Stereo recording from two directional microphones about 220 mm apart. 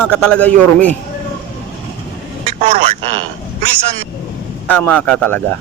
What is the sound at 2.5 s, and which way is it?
Vehicle, 35° right (ahead or behind).